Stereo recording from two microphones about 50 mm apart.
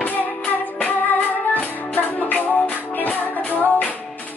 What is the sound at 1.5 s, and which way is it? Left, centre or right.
Music, left.